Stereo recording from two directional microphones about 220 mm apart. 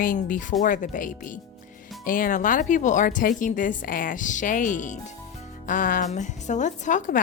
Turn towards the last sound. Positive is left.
turn(degrees=35)  # may be behind; listen again after turning